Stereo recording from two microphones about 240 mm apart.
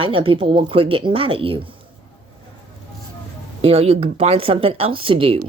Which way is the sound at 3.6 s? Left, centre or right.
Right.